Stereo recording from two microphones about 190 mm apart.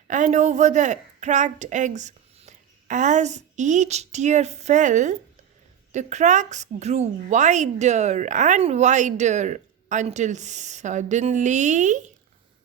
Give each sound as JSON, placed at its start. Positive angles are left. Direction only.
{"t": 0.1, "sound": "a woman's voice", "side_deg": -40}